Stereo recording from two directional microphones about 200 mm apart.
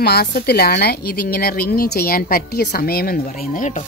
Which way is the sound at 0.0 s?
55° left (ahead or behind).